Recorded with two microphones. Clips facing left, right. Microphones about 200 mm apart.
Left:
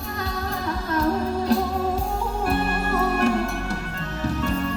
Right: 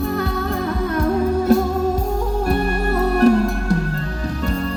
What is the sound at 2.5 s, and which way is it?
Music, 35° right (ahead or behind).